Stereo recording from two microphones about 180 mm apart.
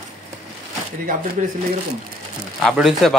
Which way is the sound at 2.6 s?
Centre (ahead or behind).